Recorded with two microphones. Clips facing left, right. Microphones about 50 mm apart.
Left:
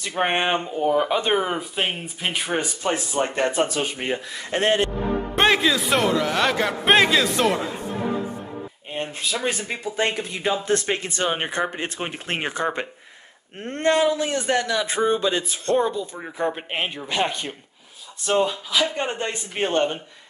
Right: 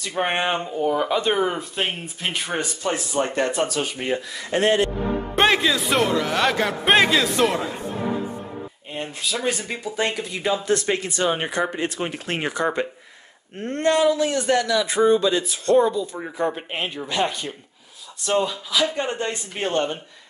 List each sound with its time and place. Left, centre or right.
0.1 s speech: left
1.4 s speech: centre
2.8 s speech: left
5.3 s speech: centre
9.9 s speech: left